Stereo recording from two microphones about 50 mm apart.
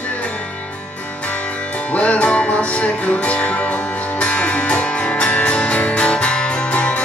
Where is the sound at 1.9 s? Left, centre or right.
Left.